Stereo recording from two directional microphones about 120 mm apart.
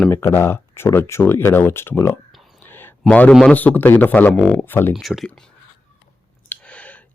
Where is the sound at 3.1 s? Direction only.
10° left (ahead or behind).